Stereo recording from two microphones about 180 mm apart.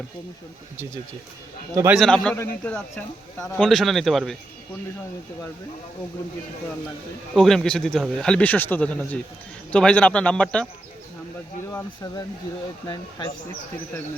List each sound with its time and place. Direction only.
1.9 s a man's voice: centre (ahead or behind)
7.3 s a man's voice: centre (ahead or behind)
12.0 s speech: 25° left (ahead or behind)